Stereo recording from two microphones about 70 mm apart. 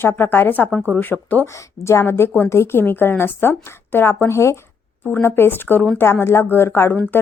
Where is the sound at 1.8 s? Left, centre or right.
Left.